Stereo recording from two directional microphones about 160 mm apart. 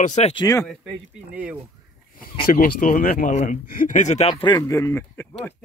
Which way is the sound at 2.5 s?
65° left (ahead or behind).